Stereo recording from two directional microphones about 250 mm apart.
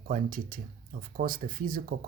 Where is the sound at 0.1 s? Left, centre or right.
Right.